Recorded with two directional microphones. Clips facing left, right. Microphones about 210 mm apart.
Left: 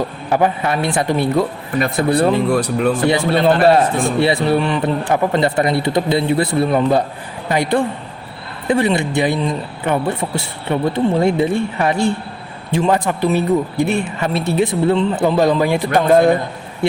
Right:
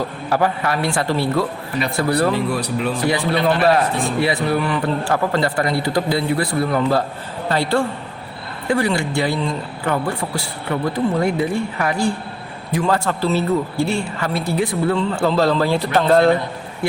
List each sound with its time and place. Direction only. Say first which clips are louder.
0.3 s speech: left 3 dB; 20° left (ahead or behind)
2.3 s speech: left 5 dB; 50° left (ahead or behind)
3.1 s a woman's voice: left 2 dB; 25° left (ahead or behind)